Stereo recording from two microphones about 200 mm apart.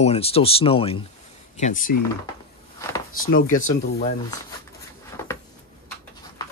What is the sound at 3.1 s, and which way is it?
Speech, 45° left (ahead or behind).